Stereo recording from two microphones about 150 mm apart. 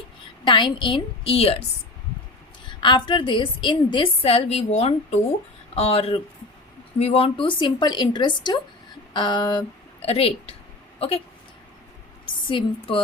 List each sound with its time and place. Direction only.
0.4 s a woman's voice: 30° left (ahead or behind)
2.6 s a woman's voice: 30° left (ahead or behind)
10.0 s a woman's voice: 40° left (ahead or behind)
12.2 s a woman's voice: 35° left (ahead or behind)